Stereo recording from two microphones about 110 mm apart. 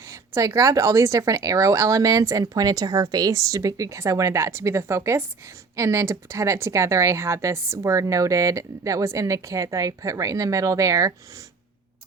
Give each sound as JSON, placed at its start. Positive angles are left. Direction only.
{"t": 0.1, "sound": "speech", "side_deg": -30}